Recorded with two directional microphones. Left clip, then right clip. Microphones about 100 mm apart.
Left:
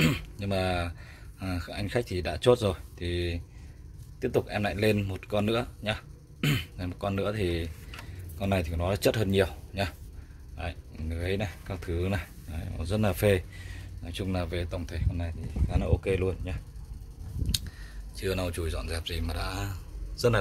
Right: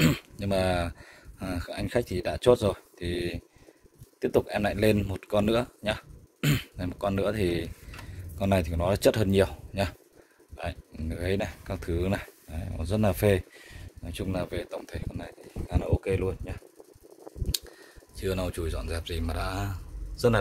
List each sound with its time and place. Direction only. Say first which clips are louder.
0.0 s a sound: right 1 dB; 45° right (ahead or behind)
1.4 s speech: right 2 dB; 35° right (ahead or behind); by 12.3 s 50° right (ahead or behind)
12.4 s speech: right 2 dB; 30° right (ahead or behind)
16.0 s speech: even; 10° left (ahead or behind)
17.5 s a sound: left 1 dB; 20° right (ahead or behind)
19.0 s a man's voice: right 2 dB; 85° right